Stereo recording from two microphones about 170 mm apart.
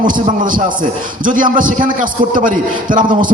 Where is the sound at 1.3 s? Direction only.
50° right (ahead or behind).